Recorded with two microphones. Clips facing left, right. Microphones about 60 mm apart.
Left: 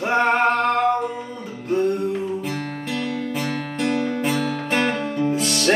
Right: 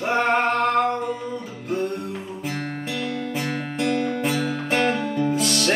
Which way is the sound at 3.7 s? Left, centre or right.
Centre.